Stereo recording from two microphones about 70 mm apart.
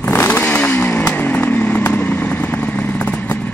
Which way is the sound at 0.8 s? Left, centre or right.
Left.